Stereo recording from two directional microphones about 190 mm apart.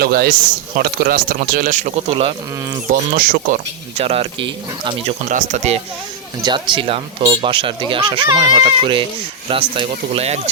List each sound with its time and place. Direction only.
0.0 s speech: 55° right (ahead or behind); by 2.3 s 30° right (ahead or behind)
2.9 s speech: 45° right (ahead or behind)
3.9 s speech: 30° right (ahead or behind)
5.3 s speech: 35° right (ahead or behind)
6.4 s speech: 25° right (ahead or behind)